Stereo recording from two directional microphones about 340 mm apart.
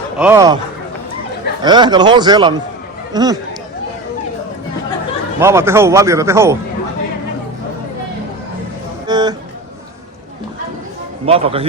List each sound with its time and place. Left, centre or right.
0.2 s speech: centre
1.6 s speech: centre
5.4 s speech: centre
9.0 s music: centre
11.3 s speech: centre